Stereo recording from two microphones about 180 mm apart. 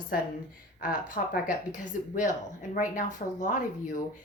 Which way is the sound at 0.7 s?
50° left (ahead or behind).